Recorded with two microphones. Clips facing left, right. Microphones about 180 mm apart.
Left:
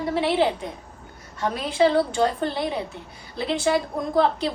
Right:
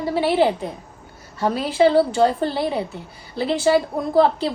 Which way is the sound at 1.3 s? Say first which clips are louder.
Right 4 dB; 30° right (ahead or behind).